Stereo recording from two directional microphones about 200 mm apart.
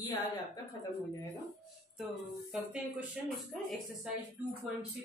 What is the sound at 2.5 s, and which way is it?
Speech, 5° right (ahead or behind).